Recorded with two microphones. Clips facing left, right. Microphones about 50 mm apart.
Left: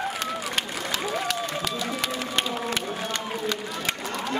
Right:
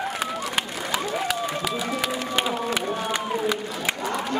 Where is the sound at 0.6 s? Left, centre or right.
Centre.